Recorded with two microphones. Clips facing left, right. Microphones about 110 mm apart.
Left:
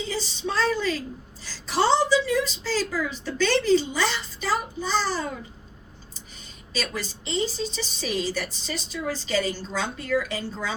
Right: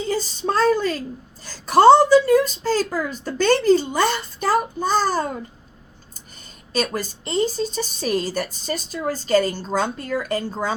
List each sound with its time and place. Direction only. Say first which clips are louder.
0.1 s a woman's voice: right 10 dB; 45° right (ahead or behind)
6.7 s a woman's voice: right 7 dB; 45° right (ahead or behind)